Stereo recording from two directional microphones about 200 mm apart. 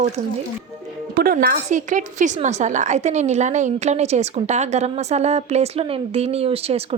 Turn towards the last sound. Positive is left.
turn(degrees=-30)  # may be behind; listen again after turning